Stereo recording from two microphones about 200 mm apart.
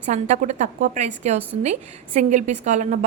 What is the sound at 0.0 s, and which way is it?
A woman's voice, 35° right (ahead or behind).